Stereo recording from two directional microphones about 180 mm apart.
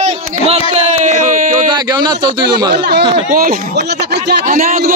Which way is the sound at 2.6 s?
65° right (ahead or behind).